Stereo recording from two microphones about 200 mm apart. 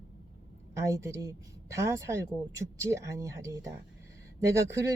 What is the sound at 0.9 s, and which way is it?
Speech, 15° right (ahead or behind).